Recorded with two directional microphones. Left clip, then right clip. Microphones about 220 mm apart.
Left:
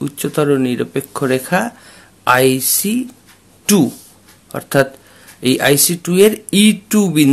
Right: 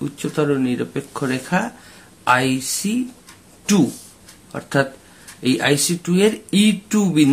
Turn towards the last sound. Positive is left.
turn(degrees=45)  # may be behind; listen again after turning